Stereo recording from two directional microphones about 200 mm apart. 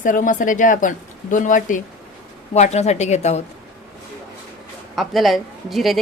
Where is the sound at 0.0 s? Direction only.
40° left (ahead or behind).